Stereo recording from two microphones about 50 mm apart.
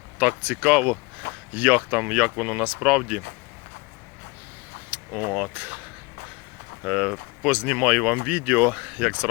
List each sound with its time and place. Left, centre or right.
0.2 s speech: right
2.0 s speech: centre
4.9 s vehicle: right
5.5 s speech: right
6.8 s speech: right
7.9 s speech: centre
8.1 s speech: right
8.9 s speech: right